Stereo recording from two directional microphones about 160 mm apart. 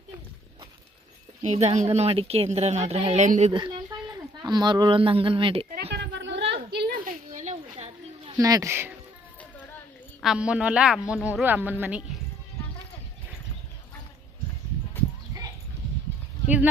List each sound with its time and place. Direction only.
1.4 s a woman's voice: 40° right (ahead or behind)
3.9 s a sound: 25° right (ahead or behind)
4.4 s a woman's voice: 25° right (ahead or behind)
5.9 s a sound: 90° right; by 7.9 s 45° right (ahead or behind)
8.3 s speech: 25° right (ahead or behind)
10.2 s a woman's voice: 5° right (ahead or behind)